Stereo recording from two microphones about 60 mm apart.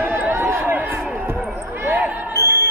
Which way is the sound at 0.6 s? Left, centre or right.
Right.